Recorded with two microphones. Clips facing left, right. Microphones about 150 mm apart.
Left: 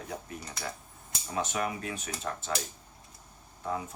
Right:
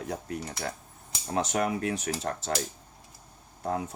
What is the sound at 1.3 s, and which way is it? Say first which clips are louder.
Cutlery: right 4 dB; 75° right (ahead or behind).